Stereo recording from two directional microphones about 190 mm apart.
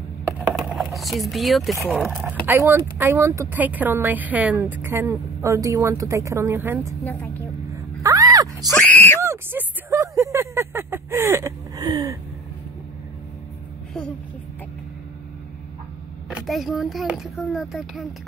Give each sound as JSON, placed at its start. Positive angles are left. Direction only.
{"t": 0.6, "sound": "vehicle", "side_deg": -5}
{"t": 1.9, "sound": "a child's voice", "side_deg": -5}
{"t": 7.7, "sound": "a sound", "side_deg": -15}
{"t": 8.5, "sound": "screaming", "side_deg": 5}
{"t": 9.2, "sound": "a sound", "side_deg": -10}
{"t": 16.3, "sound": "a child's voice", "side_deg": 0}